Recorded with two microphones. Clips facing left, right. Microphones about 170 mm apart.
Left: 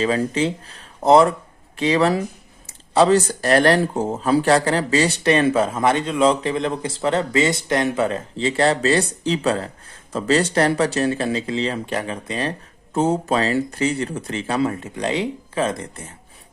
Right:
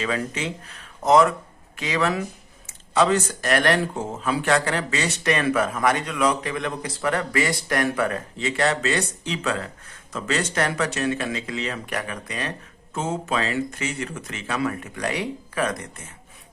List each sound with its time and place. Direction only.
0.0 s speech: 30° left (ahead or behind)